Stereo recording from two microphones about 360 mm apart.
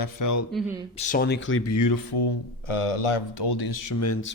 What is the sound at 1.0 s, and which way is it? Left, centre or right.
Speech, left.